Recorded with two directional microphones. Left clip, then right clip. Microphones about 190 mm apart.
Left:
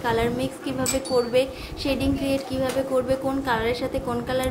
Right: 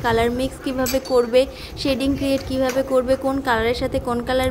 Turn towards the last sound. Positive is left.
turn(degrees=-40)  # may be behind; listen again after turning